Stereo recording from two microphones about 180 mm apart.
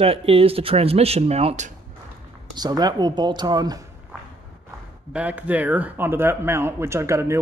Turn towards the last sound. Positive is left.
turn(degrees=-15)  # may be behind; listen again after turning